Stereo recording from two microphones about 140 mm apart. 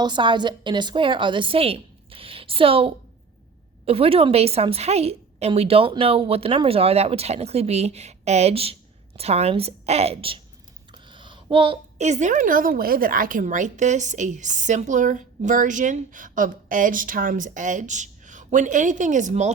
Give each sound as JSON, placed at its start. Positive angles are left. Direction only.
{"t": 0.0, "sound": "a woman's voice", "side_deg": -35}
{"t": 10.9, "sound": "a sound", "side_deg": -35}
{"t": 11.9, "sound": "a woman's voice", "side_deg": -55}